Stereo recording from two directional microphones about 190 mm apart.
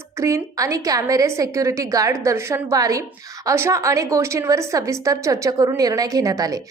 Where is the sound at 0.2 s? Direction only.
15° right (ahead or behind).